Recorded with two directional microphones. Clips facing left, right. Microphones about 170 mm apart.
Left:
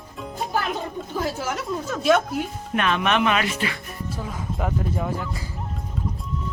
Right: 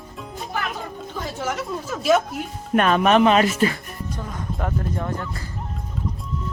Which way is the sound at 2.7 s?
45° right (ahead or behind).